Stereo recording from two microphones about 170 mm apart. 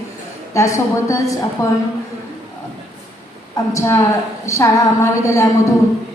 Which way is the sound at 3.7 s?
20° left (ahead or behind).